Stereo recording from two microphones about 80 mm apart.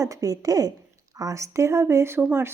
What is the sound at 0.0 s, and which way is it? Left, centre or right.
A woman's voice, right.